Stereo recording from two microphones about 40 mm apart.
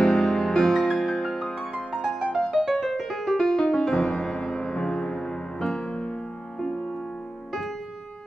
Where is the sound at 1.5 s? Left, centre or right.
Centre.